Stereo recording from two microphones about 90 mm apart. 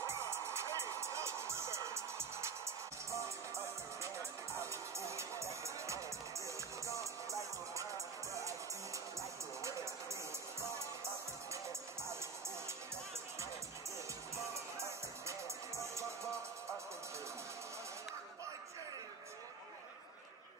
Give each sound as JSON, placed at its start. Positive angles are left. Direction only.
{"t": 0.0, "sound": "music", "side_deg": -30}
{"t": 4.6, "sound": "music", "side_deg": -30}
{"t": 14.5, "sound": "music", "side_deg": -35}